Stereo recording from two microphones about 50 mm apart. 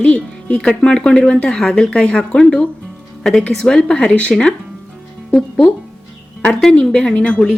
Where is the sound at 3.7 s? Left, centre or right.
Centre.